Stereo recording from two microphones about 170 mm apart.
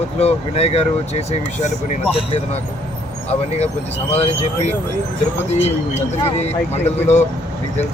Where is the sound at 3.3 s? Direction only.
40° left (ahead or behind).